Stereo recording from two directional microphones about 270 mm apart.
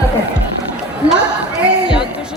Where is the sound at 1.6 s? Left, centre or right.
Centre.